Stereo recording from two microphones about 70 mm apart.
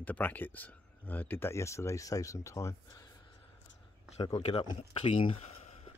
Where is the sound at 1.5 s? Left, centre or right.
Left.